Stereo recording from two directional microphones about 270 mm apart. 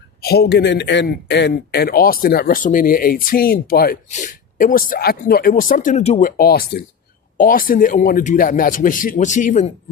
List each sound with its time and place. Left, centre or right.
0.2 s a man's voice: left